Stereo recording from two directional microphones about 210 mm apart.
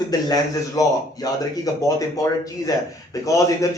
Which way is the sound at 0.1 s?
15° left (ahead or behind).